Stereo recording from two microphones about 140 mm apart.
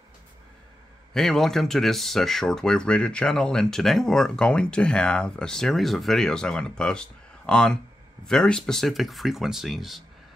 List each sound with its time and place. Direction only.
1.1 s speech: 5° left (ahead or behind)